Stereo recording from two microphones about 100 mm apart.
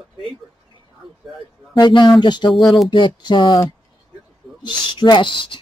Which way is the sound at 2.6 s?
Centre (ahead or behind).